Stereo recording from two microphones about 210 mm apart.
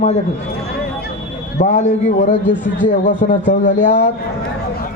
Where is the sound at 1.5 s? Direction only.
35° left (ahead or behind).